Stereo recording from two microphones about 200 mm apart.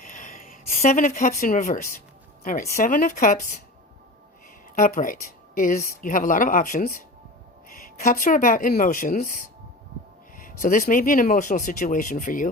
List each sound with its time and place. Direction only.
0.1 s a sound: 40° left (ahead or behind)
2.4 s speech: 35° left (ahead or behind)
4.7 s speech: 40° left (ahead or behind)
10.4 s speech: 45° left (ahead or behind)